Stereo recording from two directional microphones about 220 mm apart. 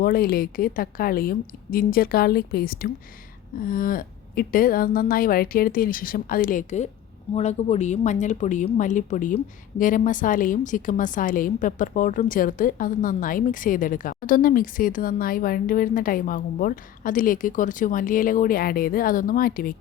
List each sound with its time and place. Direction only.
0.0 s a woman's voice: 40° left (ahead or behind)